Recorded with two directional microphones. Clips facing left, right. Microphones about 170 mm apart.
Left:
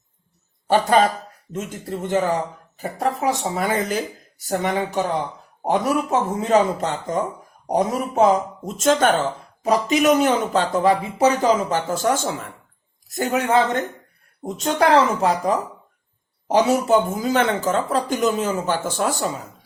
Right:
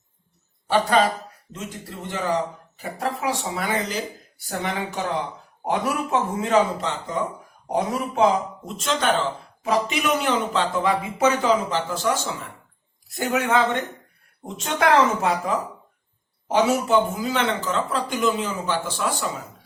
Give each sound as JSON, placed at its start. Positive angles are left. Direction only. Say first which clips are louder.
{"t": 1.5, "sound": "speech", "louder": "left 7 dB", "side_deg": 45}
{"t": 13.1, "sound": "speech", "louder": "left 2 dB", "side_deg": 35}